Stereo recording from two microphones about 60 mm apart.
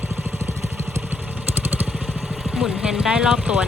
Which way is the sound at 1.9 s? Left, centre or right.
Centre.